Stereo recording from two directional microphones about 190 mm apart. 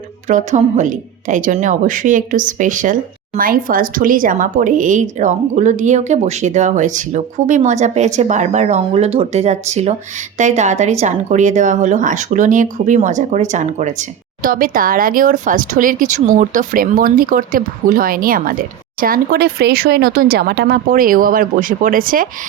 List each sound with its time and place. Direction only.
0.3 s a woman's voice: 40° right (ahead or behind)